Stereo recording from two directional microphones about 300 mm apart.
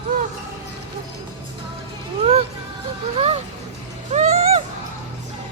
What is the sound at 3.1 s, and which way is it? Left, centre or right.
Vehicle, right.